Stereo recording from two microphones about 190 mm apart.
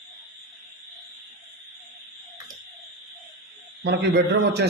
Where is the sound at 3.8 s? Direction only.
65° right (ahead or behind).